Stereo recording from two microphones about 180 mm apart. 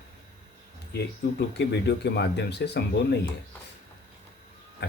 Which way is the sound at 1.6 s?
70° left (ahead or behind).